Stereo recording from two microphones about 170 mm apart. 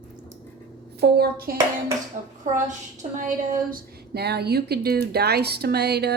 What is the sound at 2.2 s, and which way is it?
A woman's voice, 50° right (ahead or behind).